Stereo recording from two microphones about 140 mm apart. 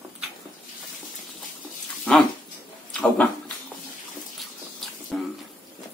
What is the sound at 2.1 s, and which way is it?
Dog, 10° left (ahead or behind).